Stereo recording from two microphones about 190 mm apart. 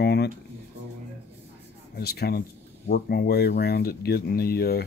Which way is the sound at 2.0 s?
55° left (ahead or behind).